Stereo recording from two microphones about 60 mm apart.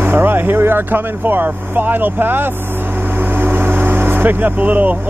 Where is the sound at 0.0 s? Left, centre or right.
Right.